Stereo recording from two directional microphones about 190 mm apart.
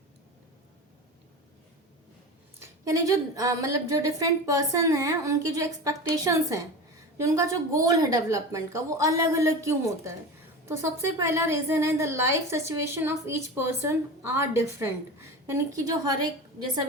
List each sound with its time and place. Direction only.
2.6 s a woman's voice: 15° right (ahead or behind)